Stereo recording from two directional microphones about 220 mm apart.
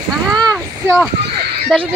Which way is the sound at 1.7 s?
Centre (ahead or behind).